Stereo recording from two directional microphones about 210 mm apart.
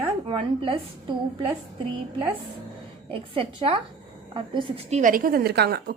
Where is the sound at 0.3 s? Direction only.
25° right (ahead or behind).